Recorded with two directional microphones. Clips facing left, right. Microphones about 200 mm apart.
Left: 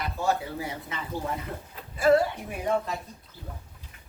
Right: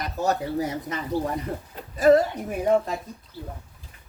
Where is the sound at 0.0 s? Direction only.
40° right (ahead or behind).